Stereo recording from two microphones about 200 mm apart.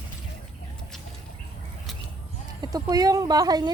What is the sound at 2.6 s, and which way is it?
Speech, 20° right (ahead or behind).